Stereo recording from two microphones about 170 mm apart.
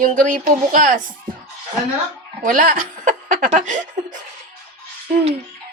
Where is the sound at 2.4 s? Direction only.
50° right (ahead or behind).